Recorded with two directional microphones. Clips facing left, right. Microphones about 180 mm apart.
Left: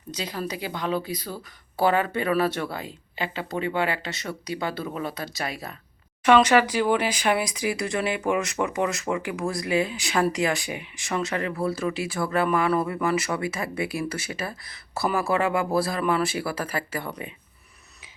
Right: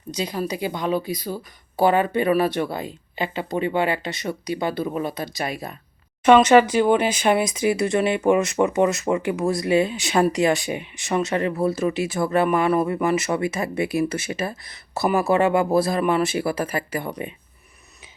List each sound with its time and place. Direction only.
0.2 s a woman's voice: 15° right (ahead or behind)